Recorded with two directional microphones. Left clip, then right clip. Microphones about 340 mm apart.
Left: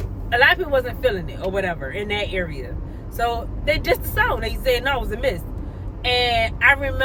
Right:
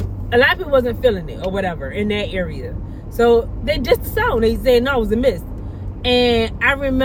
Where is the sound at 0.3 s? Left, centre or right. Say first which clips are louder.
Right 2 dB; centre.